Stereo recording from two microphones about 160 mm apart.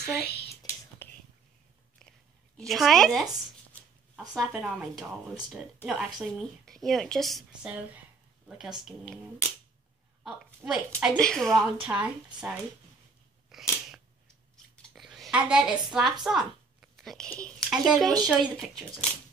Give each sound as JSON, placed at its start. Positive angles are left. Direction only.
{"t": 0.2, "sound": "speech", "side_deg": 80}
{"t": 0.6, "sound": "whispering", "side_deg": 15}
{"t": 2.0, "sound": "a sound", "side_deg": 5}
{"t": 4.3, "sound": "speech", "side_deg": -5}
{"t": 8.7, "sound": "a woman's voice", "side_deg": -5}
{"t": 13.5, "sound": "scissors", "side_deg": 0}
{"t": 14.8, "sound": "speech", "side_deg": 0}